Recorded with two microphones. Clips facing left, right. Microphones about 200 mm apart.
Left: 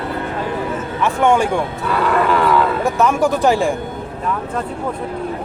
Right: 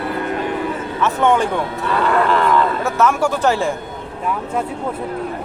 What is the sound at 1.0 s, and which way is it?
Speech, 10° left (ahead or behind).